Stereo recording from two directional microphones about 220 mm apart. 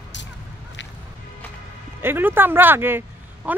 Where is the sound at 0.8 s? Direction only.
55° left (ahead or behind).